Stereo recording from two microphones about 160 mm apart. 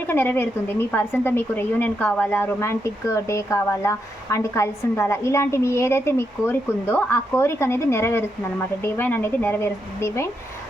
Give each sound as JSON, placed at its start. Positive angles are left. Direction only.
{"t": 0.1, "sound": "speech", "side_deg": 15}